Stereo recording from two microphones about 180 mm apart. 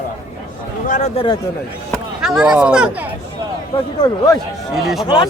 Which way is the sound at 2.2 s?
5° right (ahead or behind).